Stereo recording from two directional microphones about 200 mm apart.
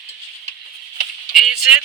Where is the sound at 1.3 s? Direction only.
Centre (ahead or behind).